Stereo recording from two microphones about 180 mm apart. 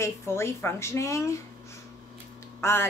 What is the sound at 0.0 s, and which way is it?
A woman's voice, 15° left (ahead or behind).